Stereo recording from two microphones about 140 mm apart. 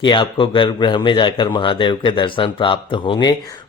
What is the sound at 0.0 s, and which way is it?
Speech, 35° left (ahead or behind).